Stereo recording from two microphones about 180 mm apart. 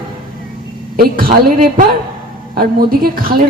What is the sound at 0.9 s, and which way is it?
A man's voice, 55° right (ahead or behind).